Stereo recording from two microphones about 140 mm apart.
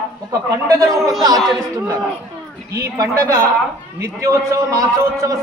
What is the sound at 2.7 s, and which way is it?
A man's voice, 25° right (ahead or behind).